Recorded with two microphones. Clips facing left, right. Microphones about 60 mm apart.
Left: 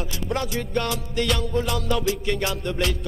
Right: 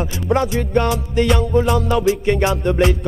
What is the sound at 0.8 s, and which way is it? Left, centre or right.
Music, centre.